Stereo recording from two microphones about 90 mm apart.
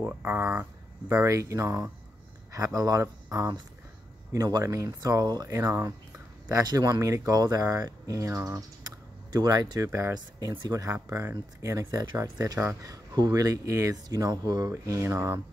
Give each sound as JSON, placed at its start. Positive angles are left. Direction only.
{"t": 0.0, "sound": "speech", "side_deg": -20}
{"t": 1.1, "sound": "speech", "side_deg": -35}